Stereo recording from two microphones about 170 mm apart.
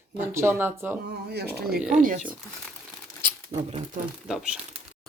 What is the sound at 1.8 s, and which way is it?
Speech, 5° right (ahead or behind).